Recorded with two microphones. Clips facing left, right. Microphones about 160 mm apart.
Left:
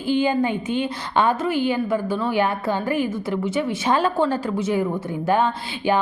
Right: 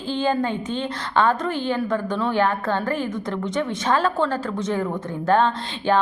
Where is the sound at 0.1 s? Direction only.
10° left (ahead or behind).